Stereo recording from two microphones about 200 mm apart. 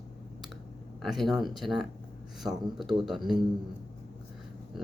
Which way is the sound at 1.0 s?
Centre (ahead or behind).